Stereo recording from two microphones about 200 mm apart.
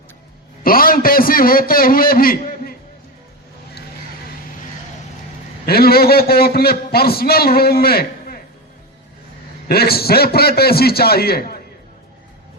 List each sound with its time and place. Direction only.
0.6 s a man's voice: 45° left (ahead or behind)
5.6 s a man's voice: 50° left (ahead or behind)
9.6 s a man's voice: 50° left (ahead or behind)